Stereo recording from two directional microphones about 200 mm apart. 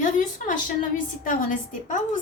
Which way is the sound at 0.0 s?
40° left (ahead or behind).